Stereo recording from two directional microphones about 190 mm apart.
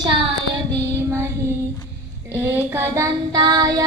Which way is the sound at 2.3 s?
10° right (ahead or behind).